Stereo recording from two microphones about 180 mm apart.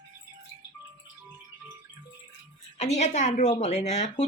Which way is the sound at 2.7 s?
40° left (ahead or behind).